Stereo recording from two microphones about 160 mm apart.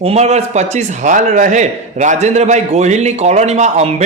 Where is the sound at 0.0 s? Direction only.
40° right (ahead or behind).